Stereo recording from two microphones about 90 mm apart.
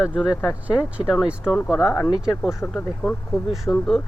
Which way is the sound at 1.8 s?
25° left (ahead or behind).